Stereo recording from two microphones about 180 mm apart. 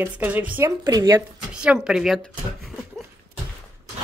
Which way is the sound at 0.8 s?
20° right (ahead or behind).